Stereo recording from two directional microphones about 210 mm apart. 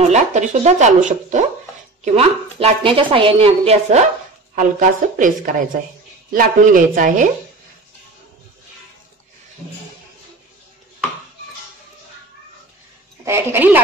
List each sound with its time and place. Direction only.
0.1 s a woman's voice: 35° right (ahead or behind)
13.2 s speech: 10° right (ahead or behind)